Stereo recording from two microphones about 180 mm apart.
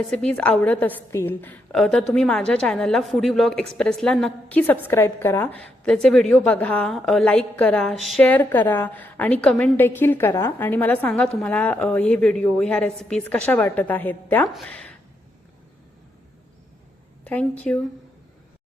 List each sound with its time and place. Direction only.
0.1 s a woman's voice: 5° left (ahead or behind)
17.2 s a woman's voice: 10° left (ahead or behind)